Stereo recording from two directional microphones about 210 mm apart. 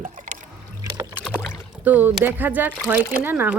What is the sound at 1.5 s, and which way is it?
Speech, 10° right (ahead or behind).